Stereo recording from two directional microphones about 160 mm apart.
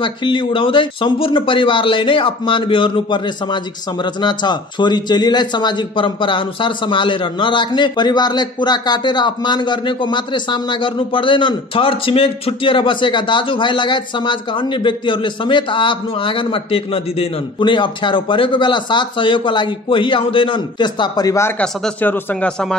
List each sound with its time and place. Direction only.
0.0 s a man's voice: 30° left (ahead or behind); by 22.8 s 5° left (ahead or behind)